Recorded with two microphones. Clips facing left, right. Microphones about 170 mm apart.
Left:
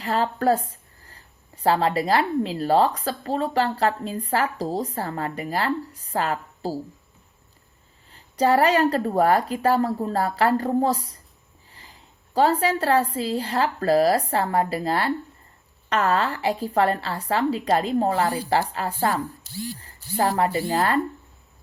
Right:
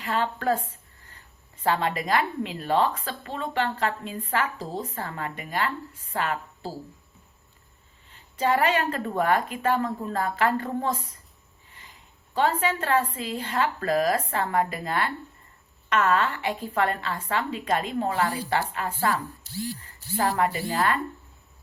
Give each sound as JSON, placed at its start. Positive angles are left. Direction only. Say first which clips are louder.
{"t": 0.0, "sound": "a woman's voice", "louder": "left 4 dB", "side_deg": 35}
{"t": 8.1, "sound": "speech", "louder": "left 5 dB", "side_deg": 35}